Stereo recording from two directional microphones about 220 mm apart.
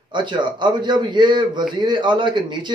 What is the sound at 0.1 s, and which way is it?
A man's voice, 20° right (ahead or behind).